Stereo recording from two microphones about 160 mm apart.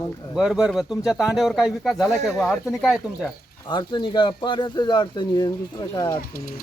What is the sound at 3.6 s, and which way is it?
Speech, 30° left (ahead or behind).